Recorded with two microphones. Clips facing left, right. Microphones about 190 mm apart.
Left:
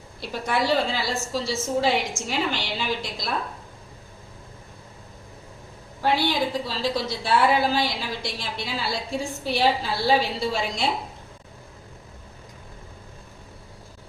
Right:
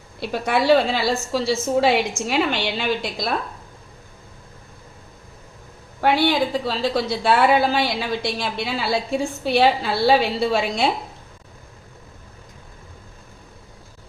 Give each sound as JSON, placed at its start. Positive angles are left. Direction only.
{"t": 0.2, "sound": "a woman's voice", "side_deg": -65}
{"t": 6.0, "sound": "a woman's voice", "side_deg": -60}